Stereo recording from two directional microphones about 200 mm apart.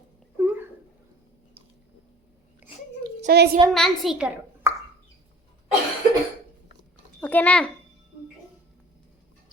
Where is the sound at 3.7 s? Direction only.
Centre (ahead or behind).